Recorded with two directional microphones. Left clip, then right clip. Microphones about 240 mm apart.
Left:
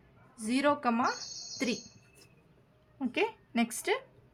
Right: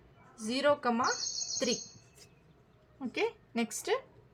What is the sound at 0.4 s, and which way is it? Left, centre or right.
Speech, left.